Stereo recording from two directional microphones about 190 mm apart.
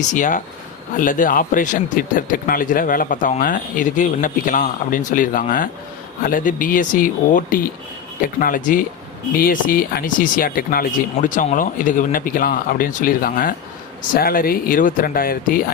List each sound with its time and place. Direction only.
0.1 s speech: 40° left (ahead or behind)